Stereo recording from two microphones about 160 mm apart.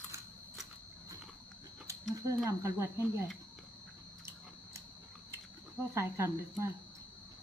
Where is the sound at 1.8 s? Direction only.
20° right (ahead or behind).